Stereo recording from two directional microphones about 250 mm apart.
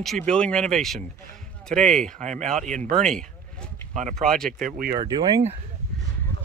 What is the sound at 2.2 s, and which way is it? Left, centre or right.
Speech, right.